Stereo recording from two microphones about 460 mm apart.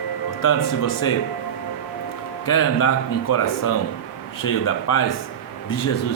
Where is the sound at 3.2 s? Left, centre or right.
Left.